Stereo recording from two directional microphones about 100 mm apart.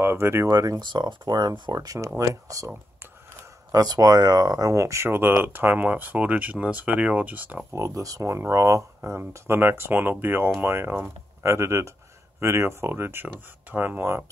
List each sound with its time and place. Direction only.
0.0 s speech: 25° right (ahead or behind)
0.5 s speech: 40° right (ahead or behind)
3.7 s speech: 40° right (ahead or behind); by 7.6 s 15° right (ahead or behind)
7.7 s speech: 30° right (ahead or behind)